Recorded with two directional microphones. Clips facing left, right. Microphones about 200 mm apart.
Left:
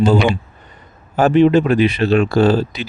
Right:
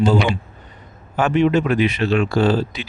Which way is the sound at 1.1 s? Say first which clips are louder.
Left 5 dB; 35° left (ahead or behind).